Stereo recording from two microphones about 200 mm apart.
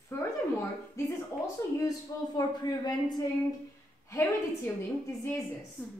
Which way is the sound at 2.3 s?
20° left (ahead or behind).